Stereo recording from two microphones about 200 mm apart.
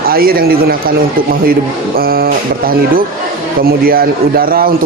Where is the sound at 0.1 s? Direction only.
50° right (ahead or behind).